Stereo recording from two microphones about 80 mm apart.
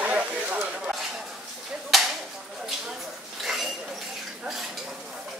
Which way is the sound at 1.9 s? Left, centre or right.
Centre.